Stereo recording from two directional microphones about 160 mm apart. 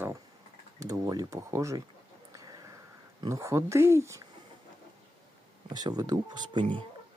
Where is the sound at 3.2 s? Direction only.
20° right (ahead or behind).